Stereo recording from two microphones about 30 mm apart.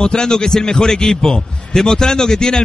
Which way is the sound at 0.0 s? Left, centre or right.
Left.